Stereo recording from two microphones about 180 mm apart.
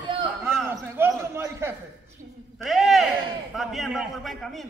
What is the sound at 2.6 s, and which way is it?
A man's voice, centre (ahead or behind).